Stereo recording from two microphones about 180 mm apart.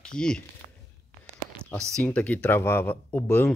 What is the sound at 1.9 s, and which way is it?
Speech, 10° left (ahead or behind).